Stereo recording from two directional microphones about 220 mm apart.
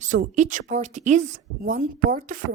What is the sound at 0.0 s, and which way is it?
A woman's voice, 35° right (ahead or behind).